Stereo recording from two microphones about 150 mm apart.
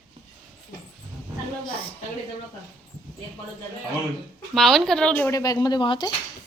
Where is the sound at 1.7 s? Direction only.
35° left (ahead or behind).